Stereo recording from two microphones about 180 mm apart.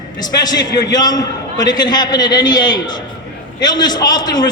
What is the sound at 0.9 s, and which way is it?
A man's voice, 20° left (ahead or behind).